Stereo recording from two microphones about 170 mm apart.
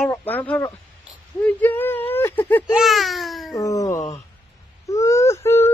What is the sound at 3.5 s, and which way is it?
Speech, 20° left (ahead or behind).